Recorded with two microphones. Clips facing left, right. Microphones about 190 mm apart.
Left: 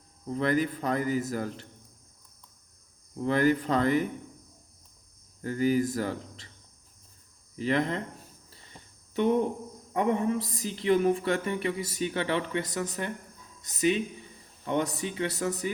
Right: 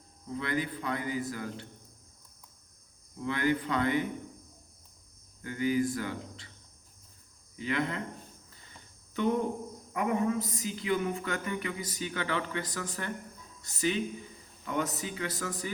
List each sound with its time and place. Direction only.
0.3 s a man's voice: 40° left (ahead or behind)
3.2 s a man's voice: 40° left (ahead or behind)
5.4 s a man's voice: 40° left (ahead or behind)
7.6 s a man's voice: 40° left (ahead or behind)
8.4 s cricket: 25° left (ahead or behind)
9.9 s a man's voice: 30° left (ahead or behind)